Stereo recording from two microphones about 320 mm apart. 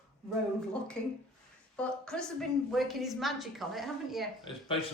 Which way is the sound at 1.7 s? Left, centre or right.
Centre.